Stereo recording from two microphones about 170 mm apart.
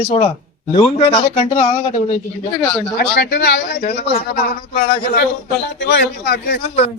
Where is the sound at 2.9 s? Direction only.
70° left (ahead or behind).